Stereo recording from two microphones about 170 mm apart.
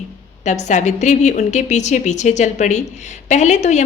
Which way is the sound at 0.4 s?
45° left (ahead or behind).